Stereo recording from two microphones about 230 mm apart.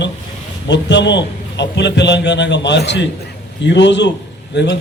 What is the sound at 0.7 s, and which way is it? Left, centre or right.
A man's voice, left.